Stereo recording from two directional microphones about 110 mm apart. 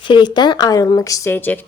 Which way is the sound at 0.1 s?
45° left (ahead or behind).